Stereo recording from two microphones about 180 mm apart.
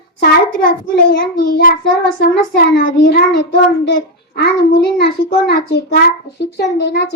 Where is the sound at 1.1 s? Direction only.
55° left (ahead or behind).